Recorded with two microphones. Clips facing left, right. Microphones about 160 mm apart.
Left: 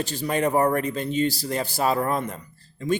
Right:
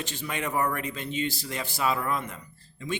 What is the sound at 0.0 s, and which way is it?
A man's voice, 35° left (ahead or behind).